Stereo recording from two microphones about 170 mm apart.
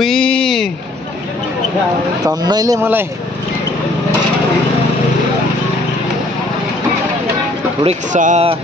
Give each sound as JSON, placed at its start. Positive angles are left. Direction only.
{"t": 0.0, "sound": "a sound", "side_deg": 5}
{"t": 2.2, "sound": "speech", "side_deg": -25}
{"t": 7.8, "sound": "speech", "side_deg": -45}